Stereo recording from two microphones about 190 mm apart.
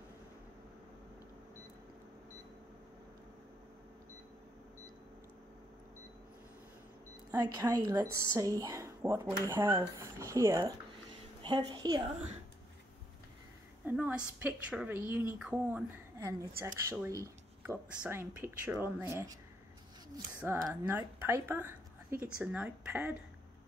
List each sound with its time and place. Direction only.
7.2 s a woman's voice: 20° right (ahead or behind)
13.8 s speech: 10° right (ahead or behind)
20.6 s speech: 10° right (ahead or behind)